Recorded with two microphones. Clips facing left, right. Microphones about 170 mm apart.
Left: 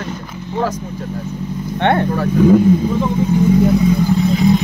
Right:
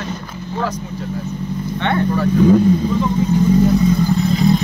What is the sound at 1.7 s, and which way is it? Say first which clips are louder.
Speech: left 3 dB; 55° left (ahead or behind).